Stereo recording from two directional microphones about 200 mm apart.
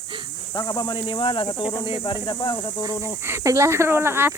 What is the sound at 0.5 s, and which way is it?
Speech, 20° left (ahead or behind).